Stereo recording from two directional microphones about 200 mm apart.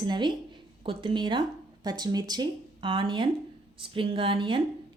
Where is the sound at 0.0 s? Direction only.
20° right (ahead or behind).